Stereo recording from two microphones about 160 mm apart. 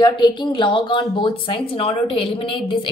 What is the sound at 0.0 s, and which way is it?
A woman's voice, 30° left (ahead or behind).